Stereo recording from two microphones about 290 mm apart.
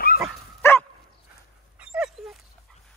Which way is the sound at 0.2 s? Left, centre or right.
Centre.